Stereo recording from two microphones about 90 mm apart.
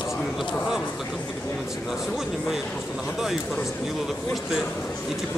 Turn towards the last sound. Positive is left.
turn(degrees=-5)  # may be behind; listen again after turning